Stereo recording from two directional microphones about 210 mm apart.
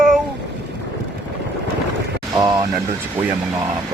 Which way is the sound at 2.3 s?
20° right (ahead or behind).